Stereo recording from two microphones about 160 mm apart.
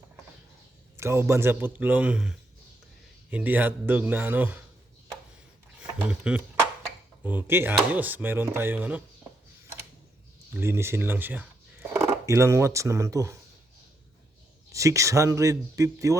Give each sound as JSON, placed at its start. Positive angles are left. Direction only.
{"t": 0.9, "sound": "speech", "side_deg": -15}
{"t": 5.8, "sound": "speech", "side_deg": -5}
{"t": 10.6, "sound": "speech", "side_deg": -15}
{"t": 14.7, "sound": "speech", "side_deg": -20}